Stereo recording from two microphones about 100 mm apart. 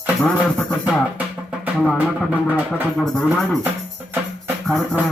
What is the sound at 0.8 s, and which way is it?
Music, 15° right (ahead or behind).